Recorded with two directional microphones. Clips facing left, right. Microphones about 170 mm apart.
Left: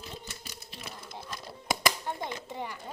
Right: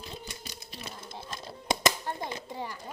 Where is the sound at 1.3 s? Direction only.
25° right (ahead or behind).